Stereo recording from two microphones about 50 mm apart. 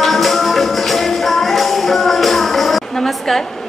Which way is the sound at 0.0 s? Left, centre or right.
Centre.